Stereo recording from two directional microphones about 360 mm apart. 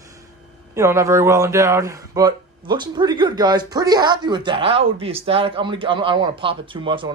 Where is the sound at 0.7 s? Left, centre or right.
Centre.